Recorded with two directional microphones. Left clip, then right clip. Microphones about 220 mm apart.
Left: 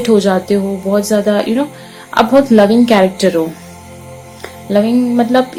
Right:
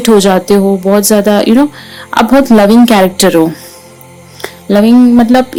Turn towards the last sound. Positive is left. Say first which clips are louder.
# right 6 dB
turn(degrees=-55)  # may be behind; listen again after turning